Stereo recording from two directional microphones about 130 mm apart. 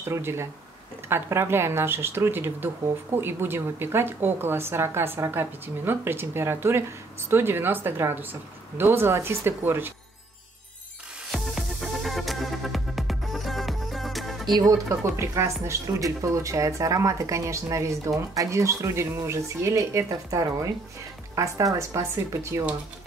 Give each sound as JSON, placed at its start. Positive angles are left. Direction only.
{"t": 0.0, "sound": "a woman's voice", "side_deg": -20}
{"t": 11.3, "sound": "music", "side_deg": 0}
{"t": 14.5, "sound": "speech", "side_deg": -25}